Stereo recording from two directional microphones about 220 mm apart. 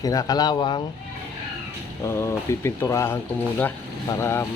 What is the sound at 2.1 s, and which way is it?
Speech, 15° left (ahead or behind).